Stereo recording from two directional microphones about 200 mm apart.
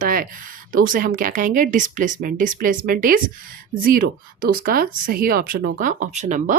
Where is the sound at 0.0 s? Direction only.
45° right (ahead or behind).